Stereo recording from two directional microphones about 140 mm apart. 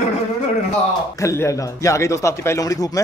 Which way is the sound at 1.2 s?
20° left (ahead or behind).